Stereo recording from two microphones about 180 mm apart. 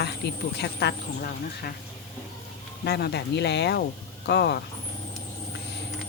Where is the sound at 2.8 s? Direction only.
65° left (ahead or behind).